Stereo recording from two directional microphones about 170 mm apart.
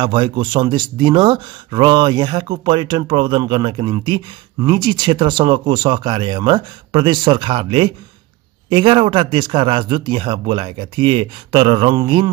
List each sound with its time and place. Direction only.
0.0 s speech: 25° right (ahead or behind)